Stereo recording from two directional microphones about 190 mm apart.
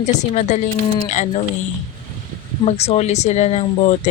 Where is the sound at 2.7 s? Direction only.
35° left (ahead or behind).